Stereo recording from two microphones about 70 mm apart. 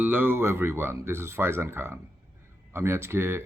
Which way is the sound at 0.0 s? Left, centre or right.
Right.